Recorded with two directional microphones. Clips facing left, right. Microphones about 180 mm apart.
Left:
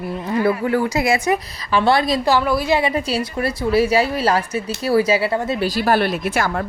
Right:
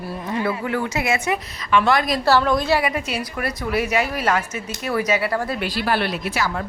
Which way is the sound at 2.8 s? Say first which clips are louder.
Left 4 dB; 30° left (ahead or behind).